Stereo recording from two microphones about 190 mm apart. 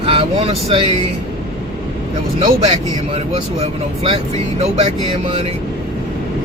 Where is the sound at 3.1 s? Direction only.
30° right (ahead or behind).